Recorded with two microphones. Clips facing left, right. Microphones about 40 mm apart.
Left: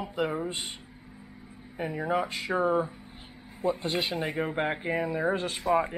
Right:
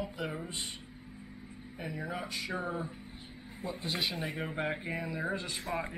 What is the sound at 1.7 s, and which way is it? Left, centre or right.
Speech, left.